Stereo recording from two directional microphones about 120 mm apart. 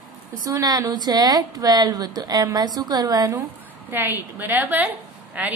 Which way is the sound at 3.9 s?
15° right (ahead or behind).